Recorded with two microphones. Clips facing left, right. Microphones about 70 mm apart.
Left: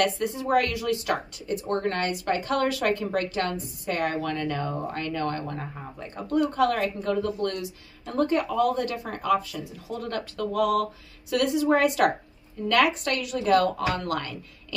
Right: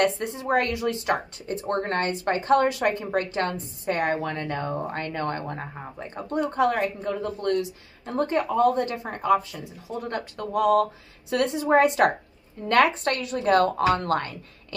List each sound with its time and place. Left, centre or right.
0.0 s a woman's voice: right